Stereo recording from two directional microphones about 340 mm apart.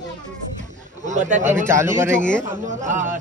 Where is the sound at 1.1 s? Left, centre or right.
Right.